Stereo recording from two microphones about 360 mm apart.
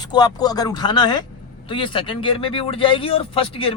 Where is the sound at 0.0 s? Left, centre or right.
Centre.